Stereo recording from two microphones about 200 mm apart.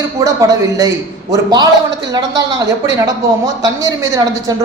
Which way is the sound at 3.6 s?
15° right (ahead or behind).